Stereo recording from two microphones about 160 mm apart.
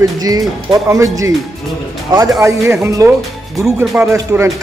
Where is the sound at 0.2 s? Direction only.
20° right (ahead or behind).